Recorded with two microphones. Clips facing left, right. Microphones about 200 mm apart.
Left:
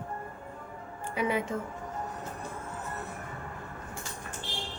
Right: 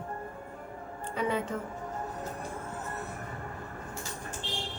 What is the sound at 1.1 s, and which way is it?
Speech, 10° left (ahead or behind).